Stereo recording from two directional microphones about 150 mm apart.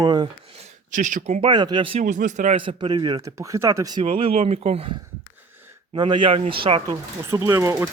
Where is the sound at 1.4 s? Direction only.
30° right (ahead or behind).